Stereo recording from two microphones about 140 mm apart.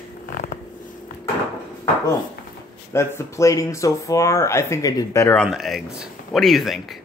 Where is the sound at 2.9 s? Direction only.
20° left (ahead or behind).